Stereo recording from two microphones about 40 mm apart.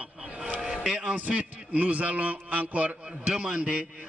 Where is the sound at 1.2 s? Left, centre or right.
Right.